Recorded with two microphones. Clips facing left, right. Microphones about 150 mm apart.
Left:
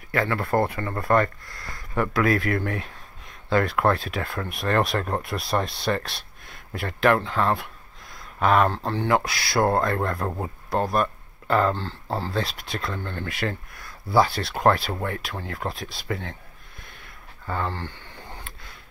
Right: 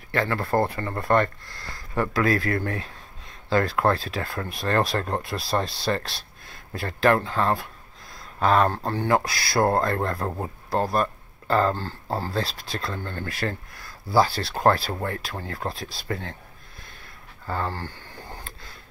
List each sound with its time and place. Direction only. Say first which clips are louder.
0.1 s speech: even; 30° right (ahead or behind)
8.1 s a sound: even; 30° right (ahead or behind)
8.8 s speech: even; 45° right (ahead or behind)
12.1 s speech: even; 10° right (ahead or behind)
12.4 s speech: even; 35° right (ahead or behind)
16.8 s a sound: left 1 dB; 35° right (ahead or behind)